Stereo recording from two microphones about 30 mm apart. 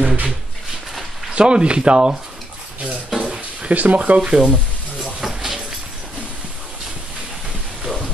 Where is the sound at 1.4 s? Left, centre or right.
Right.